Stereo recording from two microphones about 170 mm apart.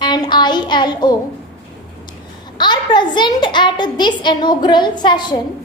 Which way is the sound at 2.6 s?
25° left (ahead or behind).